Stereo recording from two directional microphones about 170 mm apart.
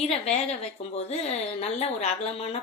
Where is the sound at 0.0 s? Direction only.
40° left (ahead or behind).